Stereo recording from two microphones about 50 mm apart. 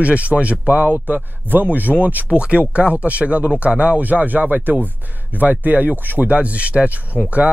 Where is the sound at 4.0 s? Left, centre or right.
Right.